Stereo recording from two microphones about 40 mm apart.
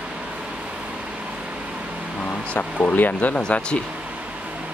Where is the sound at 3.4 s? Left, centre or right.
Left.